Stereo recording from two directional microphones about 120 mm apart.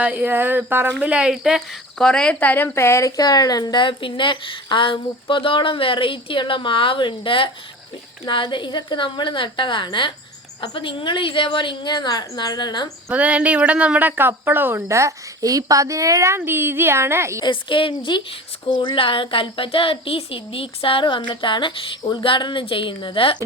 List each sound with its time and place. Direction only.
0.0 s a woman's voice: 15° right (ahead or behind); by 12.9 s 40° left (ahead or behind)
13.1 s speech: 10° right (ahead or behind)
17.4 s a woman's voice: 45° left (ahead or behind)